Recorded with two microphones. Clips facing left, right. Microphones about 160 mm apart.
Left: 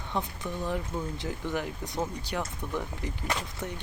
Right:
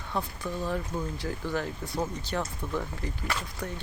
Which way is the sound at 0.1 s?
20° left (ahead or behind).